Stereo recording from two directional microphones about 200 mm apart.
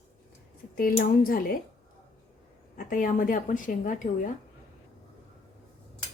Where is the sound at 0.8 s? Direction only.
45° left (ahead or behind).